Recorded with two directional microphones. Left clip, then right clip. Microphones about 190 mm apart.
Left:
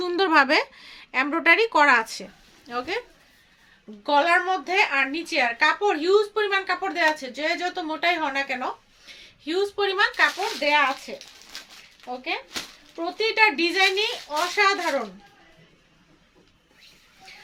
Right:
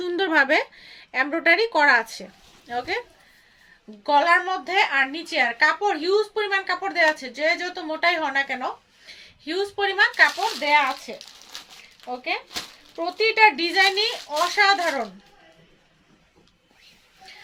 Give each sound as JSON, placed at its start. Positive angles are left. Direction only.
{"t": 0.0, "sound": "speech", "side_deg": 25}
{"t": 4.0, "sound": "speech", "side_deg": 20}
{"t": 11.5, "sound": "a sound", "side_deg": -15}
{"t": 13.0, "sound": "speech", "side_deg": 20}